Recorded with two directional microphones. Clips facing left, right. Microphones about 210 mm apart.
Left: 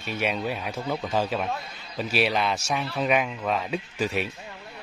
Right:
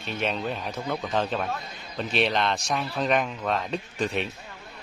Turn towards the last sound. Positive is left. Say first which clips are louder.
# left 1 dB
turn(degrees=5)  # may be behind; listen again after turning